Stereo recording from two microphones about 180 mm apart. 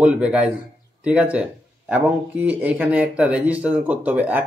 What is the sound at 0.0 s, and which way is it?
Speech, 5° right (ahead or behind).